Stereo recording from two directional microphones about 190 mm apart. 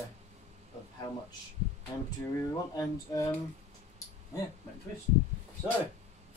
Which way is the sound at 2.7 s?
15° left (ahead or behind).